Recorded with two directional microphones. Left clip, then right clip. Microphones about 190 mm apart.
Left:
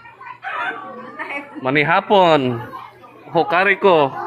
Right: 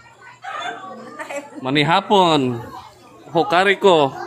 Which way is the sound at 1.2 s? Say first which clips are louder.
Left 2 dB; 70° right (ahead or behind).